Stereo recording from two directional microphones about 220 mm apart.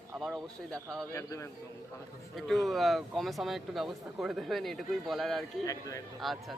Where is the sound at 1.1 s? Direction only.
15° left (ahead or behind).